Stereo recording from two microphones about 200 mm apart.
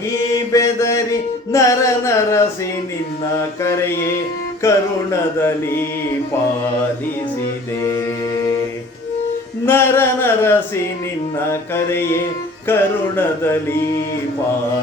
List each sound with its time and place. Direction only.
0.5 s mantra: 15° left (ahead or behind)
1.5 s music: 15° left (ahead or behind)
3.6 s music: 15° left (ahead or behind)
7.8 s music: 15° left (ahead or behind)
9.6 s music: 10° left (ahead or behind)